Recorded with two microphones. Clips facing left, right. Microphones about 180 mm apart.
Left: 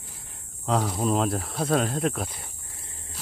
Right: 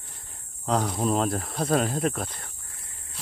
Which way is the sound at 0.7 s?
Centre (ahead or behind).